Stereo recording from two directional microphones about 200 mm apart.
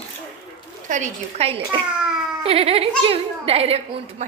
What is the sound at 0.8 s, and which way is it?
A woman's voice, 40° right (ahead or behind).